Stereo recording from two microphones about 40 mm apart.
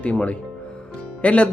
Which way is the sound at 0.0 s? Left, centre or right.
Left.